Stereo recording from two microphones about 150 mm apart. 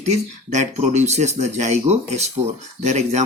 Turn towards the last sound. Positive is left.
turn(degrees=-50)  # may be behind; listen again after turning